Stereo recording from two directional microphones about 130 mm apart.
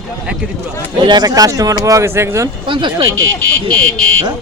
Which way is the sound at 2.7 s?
35° right (ahead or behind).